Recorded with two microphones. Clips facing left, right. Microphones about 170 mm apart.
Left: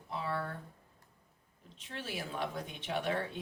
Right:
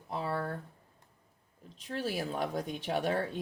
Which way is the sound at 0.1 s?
40° right (ahead or behind).